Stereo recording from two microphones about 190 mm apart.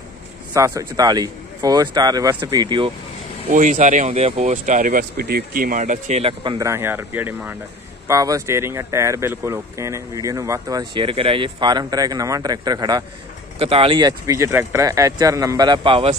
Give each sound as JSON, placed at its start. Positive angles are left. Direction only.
{"t": 0.5, "sound": "speech", "side_deg": -15}
{"t": 3.4, "sound": "speech", "side_deg": -40}